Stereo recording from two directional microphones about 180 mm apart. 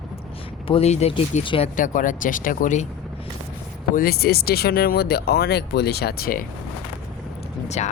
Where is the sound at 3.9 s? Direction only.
55° left (ahead or behind).